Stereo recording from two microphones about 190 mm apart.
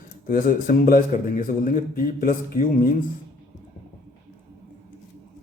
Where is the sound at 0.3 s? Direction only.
50° left (ahead or behind).